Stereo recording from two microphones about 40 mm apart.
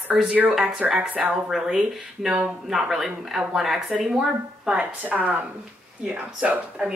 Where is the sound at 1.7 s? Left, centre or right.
Centre.